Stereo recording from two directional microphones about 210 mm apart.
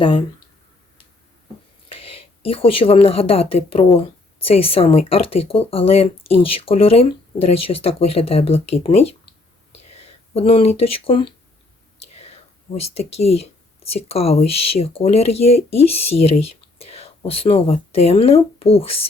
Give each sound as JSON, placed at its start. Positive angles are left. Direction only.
{"t": 0.0, "sound": "speech", "side_deg": 25}
{"t": 2.4, "sound": "a woman's voice", "side_deg": 25}
{"t": 12.9, "sound": "a woman's voice", "side_deg": 30}